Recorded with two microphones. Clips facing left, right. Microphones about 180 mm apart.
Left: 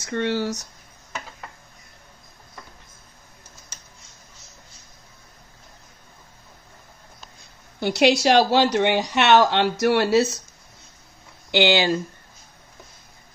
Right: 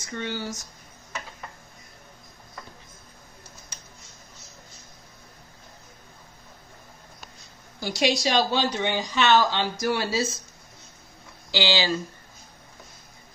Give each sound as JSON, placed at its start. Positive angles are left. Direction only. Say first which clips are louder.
{"t": 0.0, "sound": "speech", "louder": "left 8 dB", "side_deg": 70}
{"t": 7.8, "sound": "speech", "louder": "left 6 dB", "side_deg": 65}
{"t": 11.5, "sound": "speech", "louder": "left 6 dB", "side_deg": 60}